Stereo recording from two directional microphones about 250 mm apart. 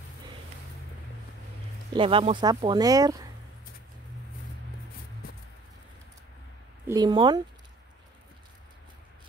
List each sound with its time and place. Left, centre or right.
2.0 s speech: right
6.9 s speech: centre